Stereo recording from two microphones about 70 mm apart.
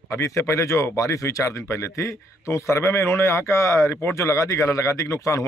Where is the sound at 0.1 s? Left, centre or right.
Left.